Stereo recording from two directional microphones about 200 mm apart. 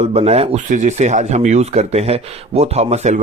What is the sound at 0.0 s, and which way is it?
Speech, 30° right (ahead or behind).